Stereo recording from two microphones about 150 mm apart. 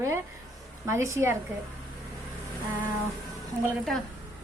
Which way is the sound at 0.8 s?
20° right (ahead or behind).